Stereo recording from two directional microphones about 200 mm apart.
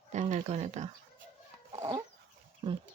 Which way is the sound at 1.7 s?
15° right (ahead or behind).